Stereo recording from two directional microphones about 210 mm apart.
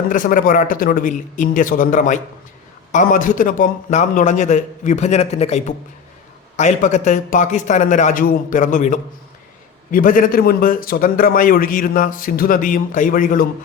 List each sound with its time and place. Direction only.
0.1 s a man's voice: 40° left (ahead or behind)